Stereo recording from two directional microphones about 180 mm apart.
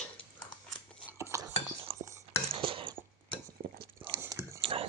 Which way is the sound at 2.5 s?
30° right (ahead or behind).